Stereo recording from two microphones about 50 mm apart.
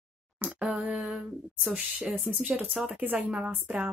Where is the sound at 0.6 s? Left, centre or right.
Centre.